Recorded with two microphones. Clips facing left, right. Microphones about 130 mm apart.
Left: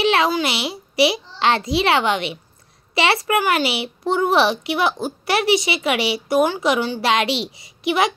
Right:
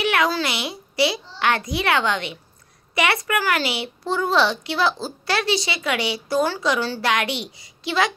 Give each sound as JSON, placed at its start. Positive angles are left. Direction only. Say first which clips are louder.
{"t": 0.0, "sound": "a child's voice", "louder": "left 3 dB", "side_deg": 25}
{"t": 2.9, "sound": "a sound", "louder": "left 3 dB", "side_deg": 25}
{"t": 3.3, "sound": "a woman's voice", "louder": "left 4 dB", "side_deg": 20}